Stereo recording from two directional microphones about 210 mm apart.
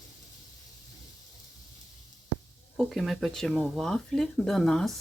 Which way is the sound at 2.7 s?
Centre (ahead or behind).